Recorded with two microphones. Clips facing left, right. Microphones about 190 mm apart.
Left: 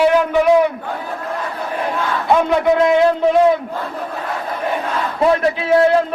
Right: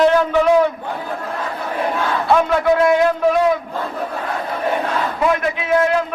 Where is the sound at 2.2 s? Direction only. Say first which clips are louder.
Left 1 dB; 20° left (ahead or behind).